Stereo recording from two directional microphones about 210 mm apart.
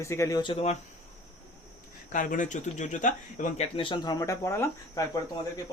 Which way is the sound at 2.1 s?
40° left (ahead or behind).